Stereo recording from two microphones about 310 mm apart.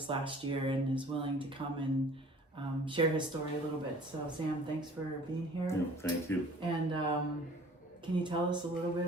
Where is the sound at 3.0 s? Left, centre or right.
Centre.